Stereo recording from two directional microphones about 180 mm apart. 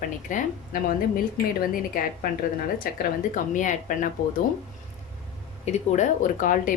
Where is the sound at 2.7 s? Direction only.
50° left (ahead or behind).